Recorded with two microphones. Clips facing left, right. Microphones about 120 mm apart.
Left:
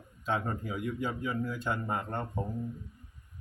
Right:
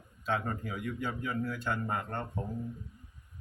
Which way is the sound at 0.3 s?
15° left (ahead or behind).